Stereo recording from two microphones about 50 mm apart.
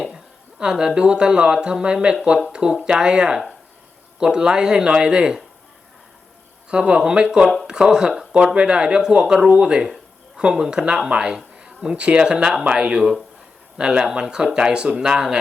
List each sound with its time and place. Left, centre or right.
0.6 s speech: centre
6.7 s speech: centre